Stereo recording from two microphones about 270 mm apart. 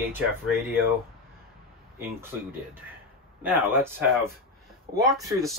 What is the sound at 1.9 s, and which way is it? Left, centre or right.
Speech, centre.